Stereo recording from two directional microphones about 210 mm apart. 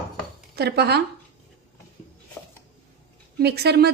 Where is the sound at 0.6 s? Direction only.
50° right (ahead or behind).